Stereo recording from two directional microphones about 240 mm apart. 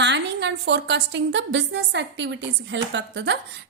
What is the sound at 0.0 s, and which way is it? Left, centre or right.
A woman's voice, right.